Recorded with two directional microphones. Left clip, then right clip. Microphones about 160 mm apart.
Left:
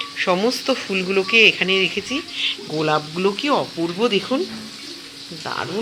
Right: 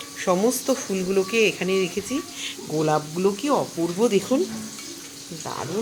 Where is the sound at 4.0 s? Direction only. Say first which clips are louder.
Left 1 dB; 15° right (ahead or behind).